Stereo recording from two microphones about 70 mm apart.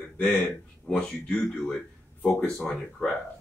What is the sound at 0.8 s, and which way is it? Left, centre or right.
Speech, centre.